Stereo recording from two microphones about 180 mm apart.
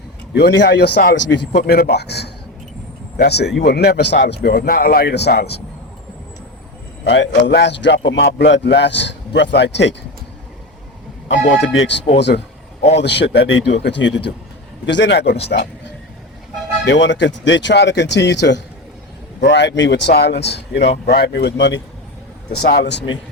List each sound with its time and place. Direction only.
0.3 s a man's voice: 70° left (ahead or behind)
7.0 s a man's voice: 90° left; by 9.9 s 75° left (ahead or behind)
11.6 s a man's voice: 80° left
16.8 s a man's voice: 85° left